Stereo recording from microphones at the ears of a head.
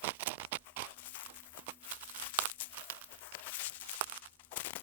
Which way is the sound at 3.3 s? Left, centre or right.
Left.